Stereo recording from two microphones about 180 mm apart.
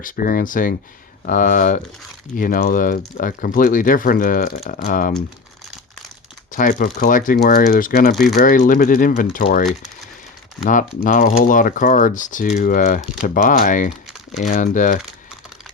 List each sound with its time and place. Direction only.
0.0 s speech: 55° left (ahead or behind)
6.5 s speech: 50° left (ahead or behind)
8.1 s speech: centre (ahead or behind)
8.4 s speech: 45° left (ahead or behind)